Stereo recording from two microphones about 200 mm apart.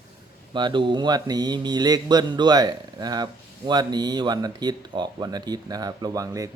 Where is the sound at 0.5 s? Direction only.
25° right (ahead or behind).